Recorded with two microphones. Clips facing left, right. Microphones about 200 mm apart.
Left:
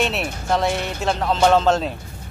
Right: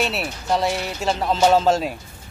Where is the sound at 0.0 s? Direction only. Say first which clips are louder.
Left 2 dB; centre (ahead or behind).